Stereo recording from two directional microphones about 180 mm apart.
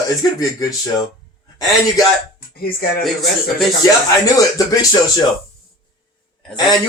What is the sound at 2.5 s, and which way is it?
Speech, 55° left (ahead or behind).